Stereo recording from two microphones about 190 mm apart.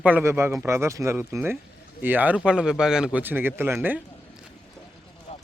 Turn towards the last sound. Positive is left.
turn(degrees=30)  # may be behind; listen again after turning